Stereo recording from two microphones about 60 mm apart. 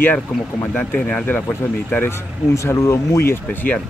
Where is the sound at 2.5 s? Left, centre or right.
Left.